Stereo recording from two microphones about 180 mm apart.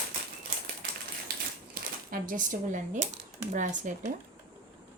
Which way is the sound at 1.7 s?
50° right (ahead or behind).